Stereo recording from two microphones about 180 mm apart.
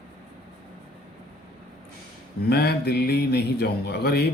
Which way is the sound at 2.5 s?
65° left (ahead or behind).